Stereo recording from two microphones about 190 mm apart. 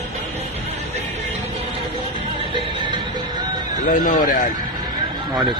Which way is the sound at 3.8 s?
45° left (ahead or behind).